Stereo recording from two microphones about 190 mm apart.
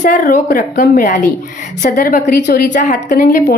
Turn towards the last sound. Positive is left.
turn(degrees=50)  # may be behind; listen again after turning